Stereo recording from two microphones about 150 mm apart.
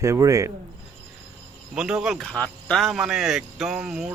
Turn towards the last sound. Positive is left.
turn(degrees=-5)  # may be behind; listen again after turning